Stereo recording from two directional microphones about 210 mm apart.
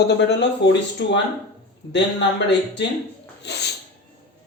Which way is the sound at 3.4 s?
55° left (ahead or behind).